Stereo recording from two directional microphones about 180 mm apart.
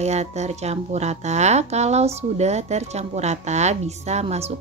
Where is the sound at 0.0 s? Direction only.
40° right (ahead or behind).